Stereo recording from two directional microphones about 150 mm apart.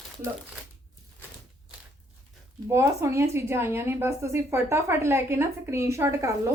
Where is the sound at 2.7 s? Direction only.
20° right (ahead or behind).